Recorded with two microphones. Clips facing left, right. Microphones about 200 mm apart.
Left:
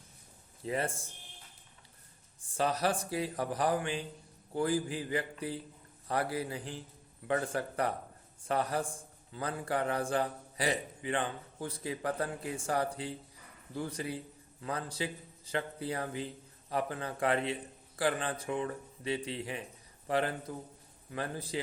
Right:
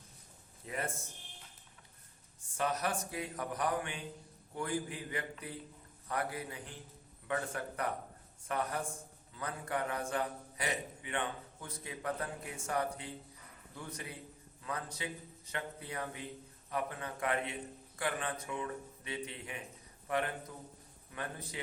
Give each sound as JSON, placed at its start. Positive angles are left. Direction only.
{"t": 0.6, "sound": "a man's voice", "side_deg": 30}
{"t": 2.6, "sound": "a man's voice", "side_deg": 30}